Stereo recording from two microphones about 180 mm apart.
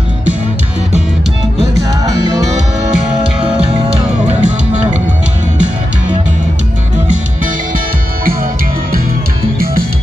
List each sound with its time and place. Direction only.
4.4 s music: 40° right (ahead or behind)